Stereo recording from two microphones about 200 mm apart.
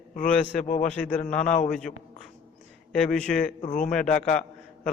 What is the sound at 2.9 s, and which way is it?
Speech, 5° left (ahead or behind).